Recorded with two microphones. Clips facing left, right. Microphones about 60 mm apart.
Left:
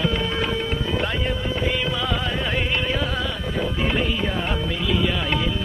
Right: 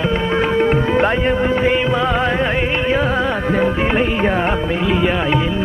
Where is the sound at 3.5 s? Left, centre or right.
Right.